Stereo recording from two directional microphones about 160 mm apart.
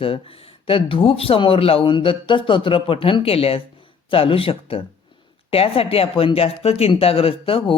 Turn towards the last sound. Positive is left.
turn(degrees=35)  # may be behind; listen again after turning